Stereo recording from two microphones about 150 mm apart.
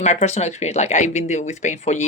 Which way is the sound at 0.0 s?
50° left (ahead or behind).